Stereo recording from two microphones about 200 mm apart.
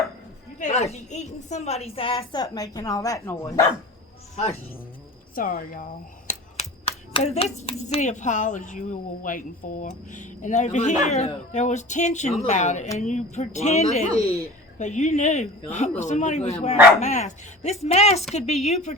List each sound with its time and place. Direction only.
0.6 s a woman's voice: 30° left (ahead or behind); by 3.7 s 15° left (ahead or behind)
5.3 s speech: 45° left (ahead or behind)